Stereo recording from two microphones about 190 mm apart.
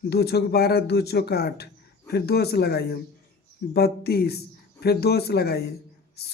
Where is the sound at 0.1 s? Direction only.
60° left (ahead or behind).